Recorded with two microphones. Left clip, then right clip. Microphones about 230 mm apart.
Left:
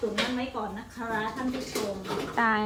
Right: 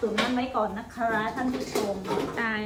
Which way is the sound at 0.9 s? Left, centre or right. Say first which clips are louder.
Right 4 dB; centre.